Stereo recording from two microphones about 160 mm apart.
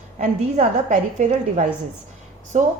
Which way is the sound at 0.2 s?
50° right (ahead or behind).